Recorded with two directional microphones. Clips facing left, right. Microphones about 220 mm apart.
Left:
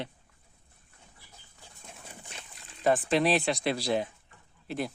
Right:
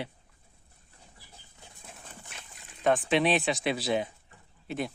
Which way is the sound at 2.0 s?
10° left (ahead or behind).